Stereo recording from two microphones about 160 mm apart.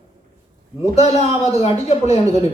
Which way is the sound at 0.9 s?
40° left (ahead or behind).